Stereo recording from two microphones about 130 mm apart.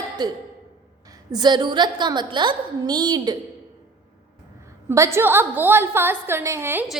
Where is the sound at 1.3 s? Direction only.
35° right (ahead or behind).